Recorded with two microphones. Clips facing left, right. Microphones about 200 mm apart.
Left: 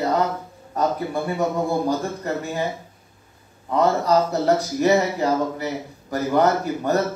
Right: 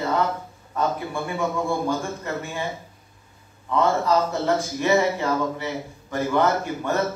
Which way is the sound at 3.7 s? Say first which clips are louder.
Left 2 dB; 40° left (ahead or behind).